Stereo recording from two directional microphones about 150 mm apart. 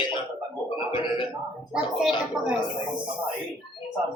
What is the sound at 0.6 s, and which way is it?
Music, 30° left (ahead or behind).